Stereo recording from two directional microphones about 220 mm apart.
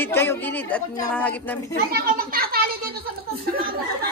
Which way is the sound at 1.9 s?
40° right (ahead or behind).